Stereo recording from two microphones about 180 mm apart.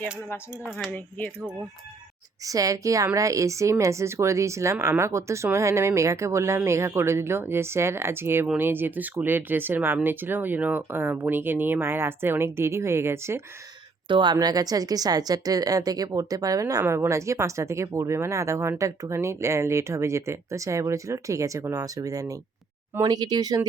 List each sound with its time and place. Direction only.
0.8 s speech: 10° left (ahead or behind)
2.4 s speech: 20° right (ahead or behind)
14.1 s speech: 25° right (ahead or behind)